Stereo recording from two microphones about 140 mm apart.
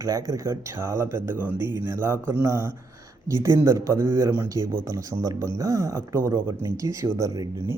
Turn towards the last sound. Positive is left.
turn(degrees=-25)  # may be behind; listen again after turning